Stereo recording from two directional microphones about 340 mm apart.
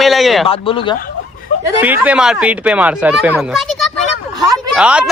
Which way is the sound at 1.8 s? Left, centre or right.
Centre.